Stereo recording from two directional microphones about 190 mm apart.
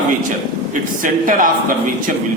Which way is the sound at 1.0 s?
45° right (ahead or behind).